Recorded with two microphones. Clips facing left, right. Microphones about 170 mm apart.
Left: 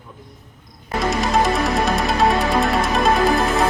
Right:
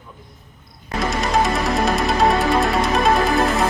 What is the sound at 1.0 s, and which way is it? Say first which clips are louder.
Music: left 1 dB; centre (ahead or behind).